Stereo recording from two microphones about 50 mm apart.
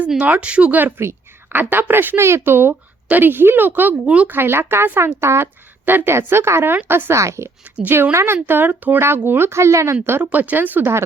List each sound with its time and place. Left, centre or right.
0.2 s speech: right
0.8 s speech: right
4.0 s speech: right
4.3 s speech: right
5.8 s speech: right
6.2 s speech: right
7.1 s speech: right
8.1 s speech: right
9.0 s speech: right
9.5 s speech: right
10.2 s speech: right